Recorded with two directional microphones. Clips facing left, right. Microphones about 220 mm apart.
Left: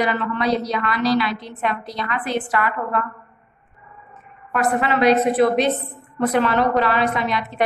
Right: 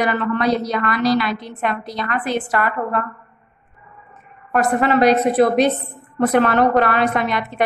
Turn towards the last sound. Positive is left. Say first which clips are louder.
# right 2 dB
turn(degrees=-50)  # may be behind; listen again after turning